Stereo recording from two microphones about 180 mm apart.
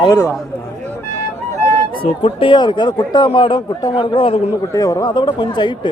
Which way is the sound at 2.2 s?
30° left (ahead or behind).